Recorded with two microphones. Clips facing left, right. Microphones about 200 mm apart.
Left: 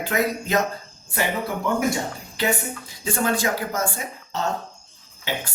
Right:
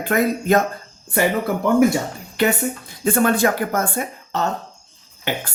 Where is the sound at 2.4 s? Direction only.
60° right (ahead or behind).